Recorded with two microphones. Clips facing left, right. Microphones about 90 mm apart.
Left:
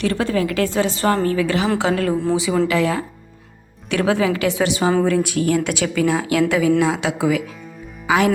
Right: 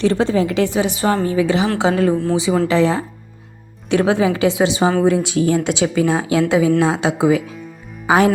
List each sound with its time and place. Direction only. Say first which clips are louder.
0.0 s a woman's voice: right 4 dB; 25° right (ahead or behind)